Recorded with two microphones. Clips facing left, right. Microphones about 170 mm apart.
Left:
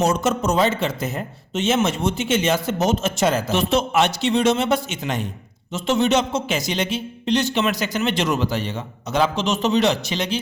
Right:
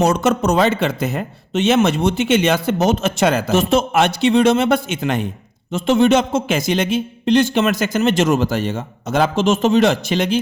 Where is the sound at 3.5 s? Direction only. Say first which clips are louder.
Right 4 dB; 50° right (ahead or behind).